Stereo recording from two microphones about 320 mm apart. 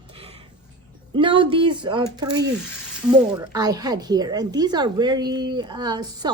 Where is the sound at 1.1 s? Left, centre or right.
Centre.